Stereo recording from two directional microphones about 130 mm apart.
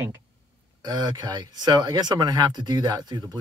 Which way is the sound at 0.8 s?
30° right (ahead or behind).